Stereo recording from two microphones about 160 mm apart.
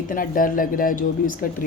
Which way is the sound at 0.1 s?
60° left (ahead or behind).